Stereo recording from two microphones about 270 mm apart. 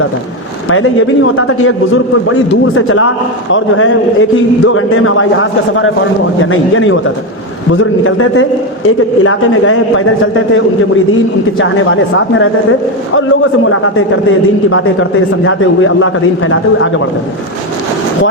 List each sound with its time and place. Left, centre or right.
0.7 s a man's voice: left
13.7 s a man's voice: left